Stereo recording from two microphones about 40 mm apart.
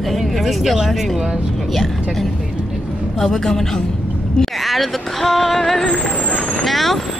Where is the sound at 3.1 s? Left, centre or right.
Centre.